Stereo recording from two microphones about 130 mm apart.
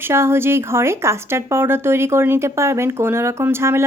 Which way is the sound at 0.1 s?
20° right (ahead or behind).